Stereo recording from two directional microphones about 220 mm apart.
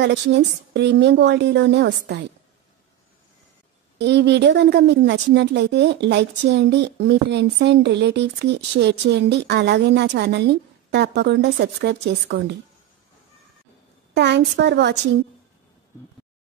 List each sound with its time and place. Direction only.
0.0 s a woman's voice: 55° right (ahead or behind)
4.0 s a woman's voice: 50° right (ahead or behind)
14.1 s a woman's voice: 50° right (ahead or behind)